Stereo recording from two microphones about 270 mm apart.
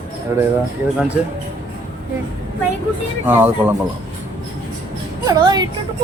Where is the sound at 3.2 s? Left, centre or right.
Centre.